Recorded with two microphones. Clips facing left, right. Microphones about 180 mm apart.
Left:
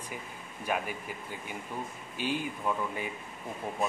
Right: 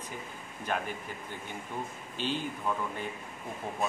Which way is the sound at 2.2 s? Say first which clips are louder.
Left 1 dB; 10° left (ahead or behind).